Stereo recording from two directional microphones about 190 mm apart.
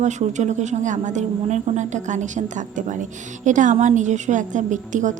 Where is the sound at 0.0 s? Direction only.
40° right (ahead or behind).